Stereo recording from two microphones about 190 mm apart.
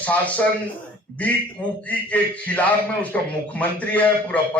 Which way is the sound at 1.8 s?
10° left (ahead or behind).